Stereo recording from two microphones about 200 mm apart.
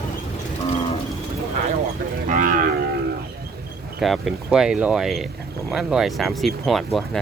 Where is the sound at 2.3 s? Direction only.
45° right (ahead or behind).